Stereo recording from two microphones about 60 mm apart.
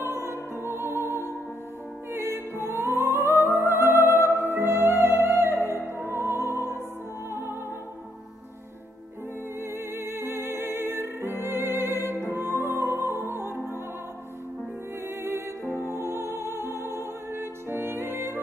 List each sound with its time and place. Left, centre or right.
0.0 s music: right
1.0 s music: left
2.1 s music: right
9.6 s music: right
16.1 s music: right